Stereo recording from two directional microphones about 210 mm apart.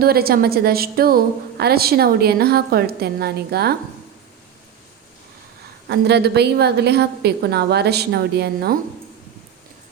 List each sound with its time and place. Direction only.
0.0 s a woman's voice: 45° right (ahead or behind)
5.9 s a woman's voice: 50° right (ahead or behind)